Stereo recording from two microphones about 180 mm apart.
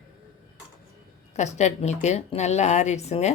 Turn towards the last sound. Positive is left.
turn(degrees=40)  # may be behind; listen again after turning